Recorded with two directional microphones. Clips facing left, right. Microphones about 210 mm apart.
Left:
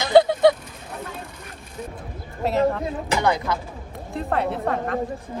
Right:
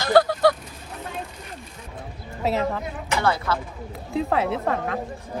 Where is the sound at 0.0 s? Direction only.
20° left (ahead or behind).